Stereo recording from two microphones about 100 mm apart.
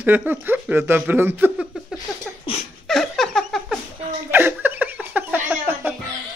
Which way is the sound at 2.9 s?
Centre (ahead or behind).